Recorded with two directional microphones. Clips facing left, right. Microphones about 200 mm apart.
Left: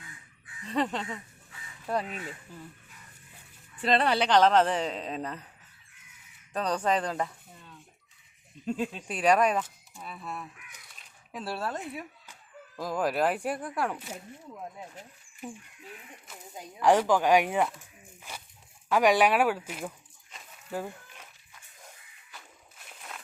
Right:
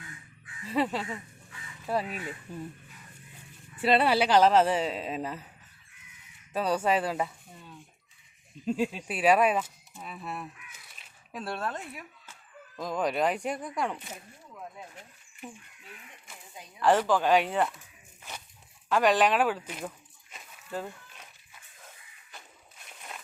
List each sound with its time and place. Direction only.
0.6 s speech: 5° right (ahead or behind)
3.8 s a woman's voice: 5° right (ahead or behind)
6.5 s speech: 5° right (ahead or behind)
10.2 s crow: 5° right (ahead or behind)
11.3 s speech: 5° left (ahead or behind)
12.2 s chicken: 15° left (ahead or behind)
12.8 s speech: 5° left (ahead or behind)
16.8 s speech: 15° left (ahead or behind)
18.2 s a sound: 10° left (ahead or behind)
18.9 s speech: 10° left (ahead or behind)